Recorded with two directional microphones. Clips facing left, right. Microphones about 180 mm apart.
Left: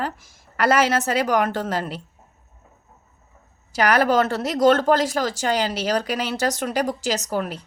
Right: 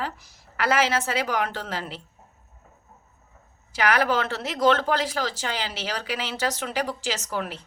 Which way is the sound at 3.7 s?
40° left (ahead or behind).